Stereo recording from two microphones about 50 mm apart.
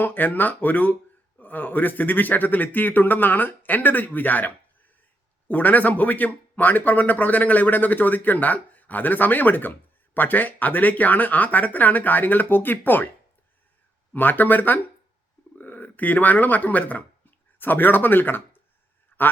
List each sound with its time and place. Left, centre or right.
0.0 s speech: left
14.1 s speech: left
19.1 s a sound: left